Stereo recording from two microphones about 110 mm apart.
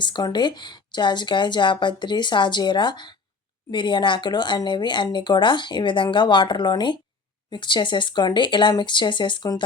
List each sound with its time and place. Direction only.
0.0 s speech: 40° left (ahead or behind)